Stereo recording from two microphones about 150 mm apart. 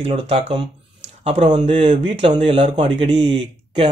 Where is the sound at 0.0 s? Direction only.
40° right (ahead or behind).